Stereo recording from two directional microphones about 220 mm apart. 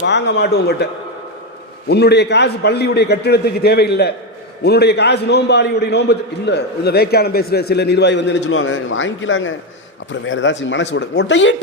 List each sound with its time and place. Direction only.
0.0 s a man's voice: 55° left (ahead or behind)
1.9 s a man's voice: 50° left (ahead or behind)